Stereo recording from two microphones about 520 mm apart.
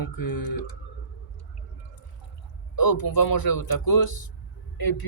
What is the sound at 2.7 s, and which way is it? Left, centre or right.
A man's voice, left.